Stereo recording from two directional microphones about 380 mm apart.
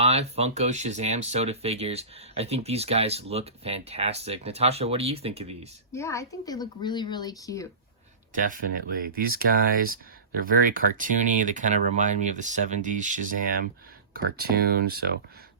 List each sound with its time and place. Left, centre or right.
0.0 s speech: centre
5.9 s speech: centre
8.4 s speech: right